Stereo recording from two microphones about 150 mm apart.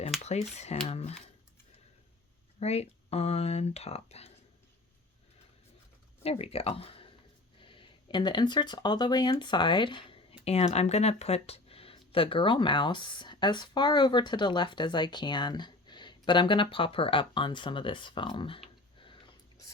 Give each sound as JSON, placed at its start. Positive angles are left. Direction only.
{"t": 0.2, "sound": "speech", "side_deg": 45}
{"t": 2.6, "sound": "speech", "side_deg": 45}
{"t": 6.2, "sound": "speech", "side_deg": 40}
{"t": 18.9, "sound": "a sound", "side_deg": 35}